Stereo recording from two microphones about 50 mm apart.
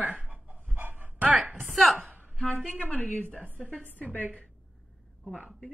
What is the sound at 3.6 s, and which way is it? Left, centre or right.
Speech, right.